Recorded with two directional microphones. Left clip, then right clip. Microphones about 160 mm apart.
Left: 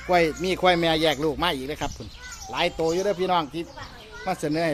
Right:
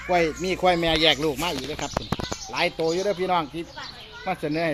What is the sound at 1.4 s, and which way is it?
Speech, 20° left (ahead or behind).